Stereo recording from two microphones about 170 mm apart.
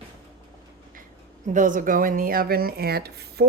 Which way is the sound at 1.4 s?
50° right (ahead or behind).